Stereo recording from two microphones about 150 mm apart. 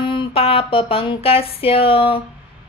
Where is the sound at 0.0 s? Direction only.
35° left (ahead or behind).